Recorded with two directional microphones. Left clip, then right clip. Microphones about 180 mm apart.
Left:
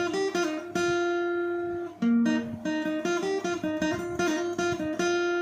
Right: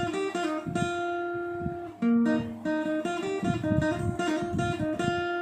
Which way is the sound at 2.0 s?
25° left (ahead or behind).